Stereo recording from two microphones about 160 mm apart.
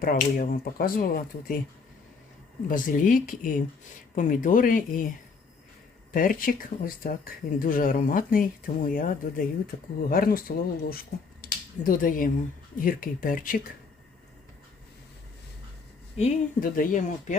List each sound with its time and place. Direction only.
0.0 s speech: 60° left (ahead or behind)
2.6 s speech: 55° left (ahead or behind)
6.1 s speech: 60° left (ahead or behind)
16.1 s speech: 50° left (ahead or behind)